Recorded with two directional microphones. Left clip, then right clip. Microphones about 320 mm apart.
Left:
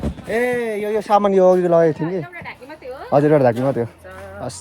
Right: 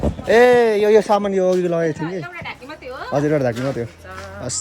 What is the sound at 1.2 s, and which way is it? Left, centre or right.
Speech, centre.